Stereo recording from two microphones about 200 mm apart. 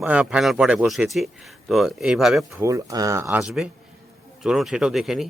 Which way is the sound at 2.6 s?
15° right (ahead or behind).